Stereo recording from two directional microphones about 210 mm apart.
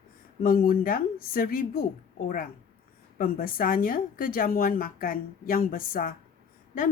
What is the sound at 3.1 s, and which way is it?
A woman's voice, 40° left (ahead or behind).